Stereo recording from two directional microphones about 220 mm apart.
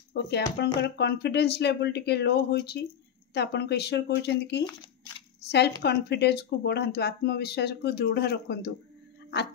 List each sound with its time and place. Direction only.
0.1 s speech: 45° left (ahead or behind)